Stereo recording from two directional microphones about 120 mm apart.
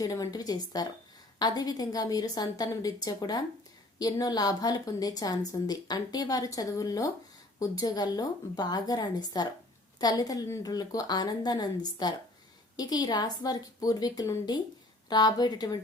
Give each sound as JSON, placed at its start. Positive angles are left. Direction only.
{"t": 0.0, "sound": "a woman's voice", "side_deg": 30}